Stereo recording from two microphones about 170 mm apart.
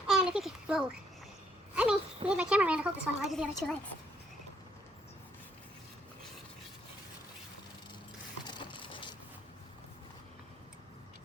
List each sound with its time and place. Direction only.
0.1 s a sound: 5° right (ahead or behind)
1.7 s speech: 5° right (ahead or behind)
8.4 s ratchet: 30° left (ahead or behind)